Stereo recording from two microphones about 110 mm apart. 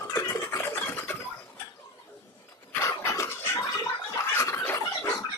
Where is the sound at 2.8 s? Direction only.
25° left (ahead or behind).